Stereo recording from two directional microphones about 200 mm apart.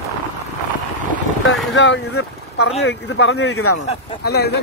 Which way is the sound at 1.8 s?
65° left (ahead or behind).